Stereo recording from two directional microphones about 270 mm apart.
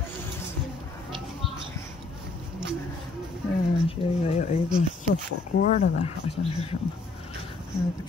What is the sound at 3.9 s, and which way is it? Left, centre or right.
Speech, left.